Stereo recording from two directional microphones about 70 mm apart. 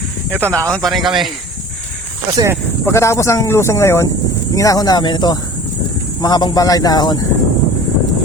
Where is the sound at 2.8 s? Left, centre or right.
Left.